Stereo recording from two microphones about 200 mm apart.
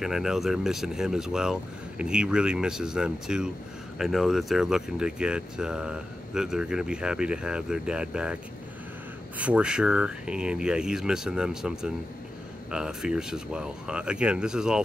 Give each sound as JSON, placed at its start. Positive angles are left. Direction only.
{"t": 0.0, "sound": "speech", "side_deg": 0}
{"t": 9.4, "sound": "speech", "side_deg": -5}